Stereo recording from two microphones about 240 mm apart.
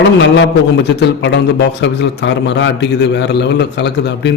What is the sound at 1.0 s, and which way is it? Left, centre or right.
A man's voice, left.